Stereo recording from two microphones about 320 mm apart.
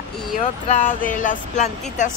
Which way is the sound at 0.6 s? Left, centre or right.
Left.